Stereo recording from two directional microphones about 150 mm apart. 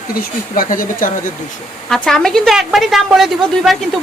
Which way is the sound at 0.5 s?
65° left (ahead or behind).